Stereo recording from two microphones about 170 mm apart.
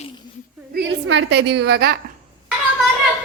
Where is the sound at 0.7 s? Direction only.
90° right; by 1.9 s 75° right (ahead or behind).